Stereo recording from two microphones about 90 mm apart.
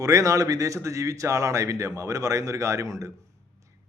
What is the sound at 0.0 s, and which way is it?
Speech, 40° right (ahead or behind).